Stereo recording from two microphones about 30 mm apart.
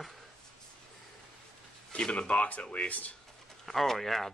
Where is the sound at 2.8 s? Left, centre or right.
Left.